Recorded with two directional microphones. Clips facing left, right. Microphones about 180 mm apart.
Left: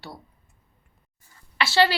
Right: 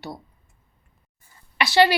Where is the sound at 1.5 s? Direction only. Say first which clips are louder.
Right 3 dB; 15° right (ahead or behind).